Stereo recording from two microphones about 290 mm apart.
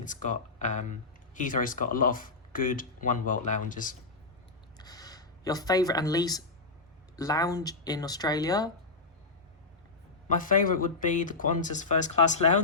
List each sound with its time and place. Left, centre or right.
0.0 s speech: left
4.8 s speech: centre
10.2 s speech: left